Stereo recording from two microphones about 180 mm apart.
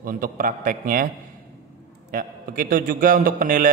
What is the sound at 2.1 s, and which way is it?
A man's voice, 50° right (ahead or behind).